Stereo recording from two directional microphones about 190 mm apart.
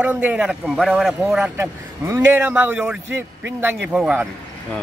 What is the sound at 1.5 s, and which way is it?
Speech, 10° right (ahead or behind).